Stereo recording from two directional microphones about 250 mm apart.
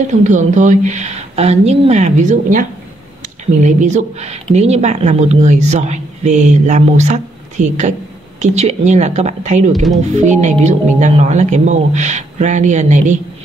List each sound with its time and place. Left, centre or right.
0.2 s speech: right
3.6 s speech: right